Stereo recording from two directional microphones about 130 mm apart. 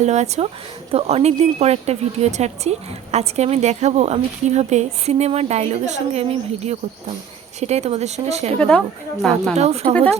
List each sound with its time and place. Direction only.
0.0 s a woman's voice: 60° right (ahead or behind)
0.9 s a woman's voice: 50° right (ahead or behind)
8.5 s a woman's voice: 10° left (ahead or behind)
9.6 s a woman's voice: 50° right (ahead or behind)